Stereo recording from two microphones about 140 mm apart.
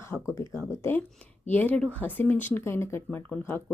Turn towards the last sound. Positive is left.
turn(degrees=15)  # may be behind; listen again after turning